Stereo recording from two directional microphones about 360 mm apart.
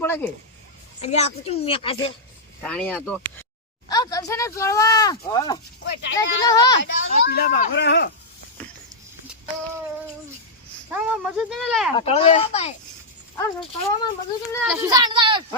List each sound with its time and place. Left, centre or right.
0.0 s a sound: centre
1.0 s speech: centre
2.6 s speech: centre
5.8 s speech: left
6.4 s speech: centre
6.8 s speech: left
10.9 s speech: centre
11.9 s speech: centre
14.7 s speech: centre